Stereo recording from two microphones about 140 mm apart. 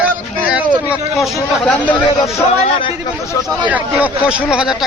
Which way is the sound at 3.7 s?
10° right (ahead or behind).